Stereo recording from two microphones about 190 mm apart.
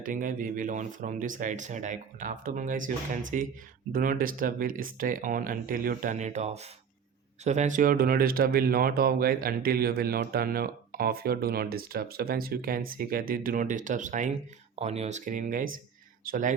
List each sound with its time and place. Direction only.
0.0 s speech: 45° right (ahead or behind)